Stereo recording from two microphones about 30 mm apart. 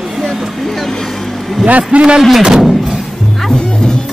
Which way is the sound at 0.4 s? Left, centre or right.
Centre.